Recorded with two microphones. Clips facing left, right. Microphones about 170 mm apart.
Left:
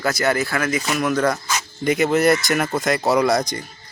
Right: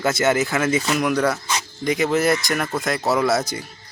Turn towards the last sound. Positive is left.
turn(degrees=-5)  # may be behind; listen again after turning